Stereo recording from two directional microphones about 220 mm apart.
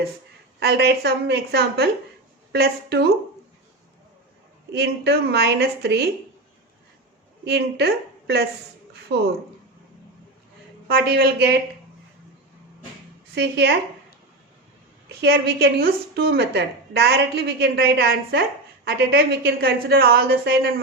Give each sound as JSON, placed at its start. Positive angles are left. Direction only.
{"t": 0.6, "sound": "a woman's voice", "side_deg": -50}
{"t": 4.7, "sound": "a woman's voice", "side_deg": -50}
{"t": 7.4, "sound": "a woman's voice", "side_deg": -50}
{"t": 10.8, "sound": "a woman's voice", "side_deg": -45}
{"t": 13.3, "sound": "a woman's voice", "side_deg": -50}
{"t": 15.2, "sound": "a woman's voice", "side_deg": -50}